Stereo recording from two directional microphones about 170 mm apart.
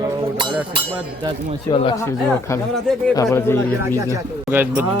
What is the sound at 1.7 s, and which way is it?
Speech, 25° left (ahead or behind).